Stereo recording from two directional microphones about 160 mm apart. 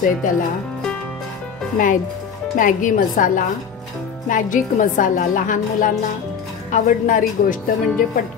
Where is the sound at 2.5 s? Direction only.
55° left (ahead or behind).